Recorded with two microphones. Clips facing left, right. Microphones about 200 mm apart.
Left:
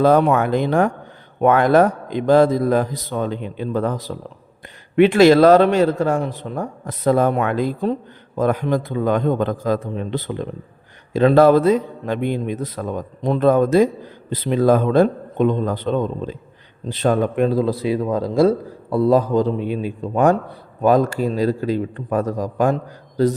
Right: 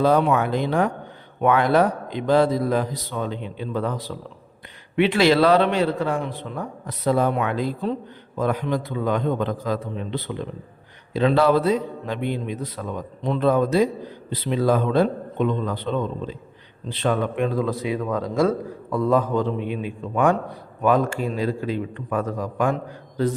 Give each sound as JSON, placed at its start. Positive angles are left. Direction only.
{"t": 0.0, "sound": "a man's voice", "side_deg": 50}